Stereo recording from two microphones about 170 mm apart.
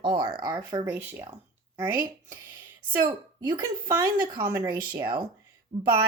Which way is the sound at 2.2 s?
20° right (ahead or behind).